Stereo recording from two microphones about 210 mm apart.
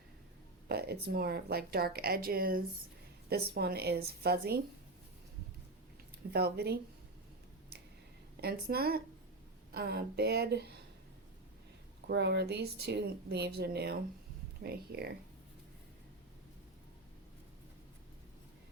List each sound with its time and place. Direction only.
0.7 s speech: 50° right (ahead or behind)
6.3 s speech: 50° right (ahead or behind)
8.4 s speech: 45° right (ahead or behind)
12.0 s speech: 55° right (ahead or behind)